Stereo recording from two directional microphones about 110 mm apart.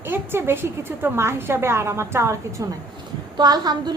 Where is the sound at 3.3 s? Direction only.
35° right (ahead or behind).